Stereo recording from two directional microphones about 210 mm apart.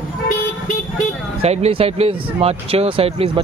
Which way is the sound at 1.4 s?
30° right (ahead or behind).